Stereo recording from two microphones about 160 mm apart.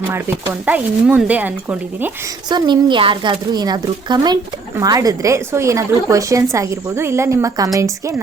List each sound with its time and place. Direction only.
0.6 s speech: 10° right (ahead or behind)
2.5 s a woman's voice: 30° right (ahead or behind)